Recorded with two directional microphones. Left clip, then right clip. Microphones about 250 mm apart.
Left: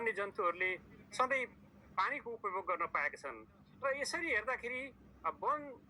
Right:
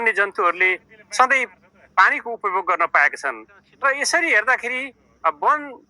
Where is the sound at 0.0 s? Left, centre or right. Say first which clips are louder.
Right 17 dB; right.